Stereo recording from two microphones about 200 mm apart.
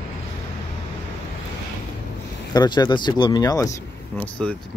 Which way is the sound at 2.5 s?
20° left (ahead or behind).